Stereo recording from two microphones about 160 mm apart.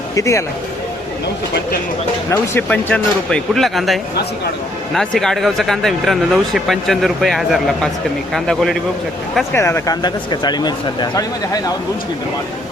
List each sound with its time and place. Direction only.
0.2 s speech: 20° left (ahead or behind)
2.6 s speech: 5° left (ahead or behind)
9.5 s speech: 15° left (ahead or behind)